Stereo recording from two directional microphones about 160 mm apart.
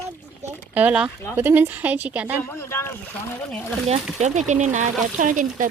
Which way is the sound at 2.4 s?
15° left (ahead or behind).